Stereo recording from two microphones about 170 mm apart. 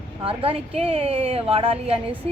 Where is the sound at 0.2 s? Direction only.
30° right (ahead or behind).